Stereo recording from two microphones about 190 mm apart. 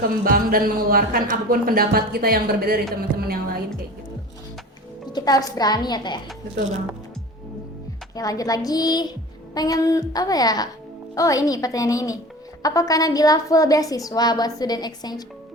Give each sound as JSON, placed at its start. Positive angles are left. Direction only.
{"t": 0.3, "sound": "speech", "side_deg": -50}
{"t": 5.0, "sound": "music", "side_deg": 20}
{"t": 5.5, "sound": "a woman's voice", "side_deg": 20}
{"t": 8.1, "sound": "a woman's voice", "side_deg": 20}